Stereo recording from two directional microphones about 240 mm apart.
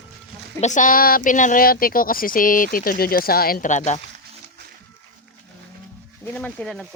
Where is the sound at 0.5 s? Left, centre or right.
Left.